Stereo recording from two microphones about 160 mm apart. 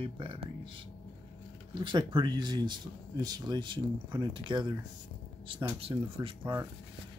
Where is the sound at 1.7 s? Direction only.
30° right (ahead or behind).